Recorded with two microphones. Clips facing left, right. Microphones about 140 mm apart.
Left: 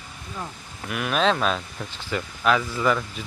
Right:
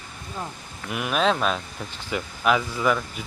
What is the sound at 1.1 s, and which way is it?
Speech, 5° right (ahead or behind).